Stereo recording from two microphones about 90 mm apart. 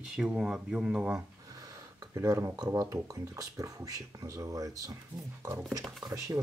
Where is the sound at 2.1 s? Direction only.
35° right (ahead or behind).